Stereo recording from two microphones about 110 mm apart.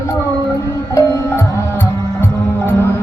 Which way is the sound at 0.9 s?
25° left (ahead or behind).